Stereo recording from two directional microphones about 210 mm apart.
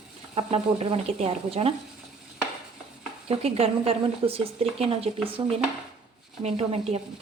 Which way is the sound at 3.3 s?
30° right (ahead or behind).